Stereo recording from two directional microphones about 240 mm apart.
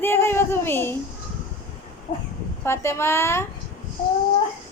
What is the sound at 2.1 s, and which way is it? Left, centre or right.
Speech, left.